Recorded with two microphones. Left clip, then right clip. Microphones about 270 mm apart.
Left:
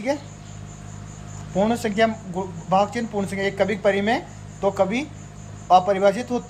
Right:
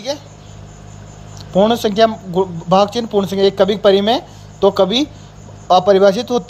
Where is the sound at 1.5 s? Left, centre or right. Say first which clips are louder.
Right 8 dB; right.